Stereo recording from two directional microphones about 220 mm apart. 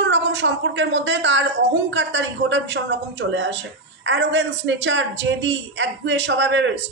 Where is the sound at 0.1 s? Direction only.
55° right (ahead or behind).